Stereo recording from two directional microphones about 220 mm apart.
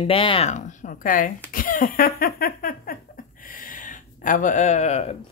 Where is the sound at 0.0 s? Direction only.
25° left (ahead or behind).